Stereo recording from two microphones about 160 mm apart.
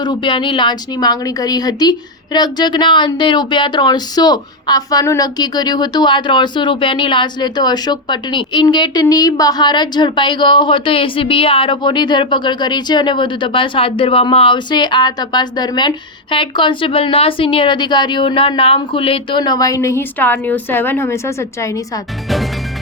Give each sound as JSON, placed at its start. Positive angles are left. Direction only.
{"t": 0.0, "sound": "a woman's voice", "side_deg": 30}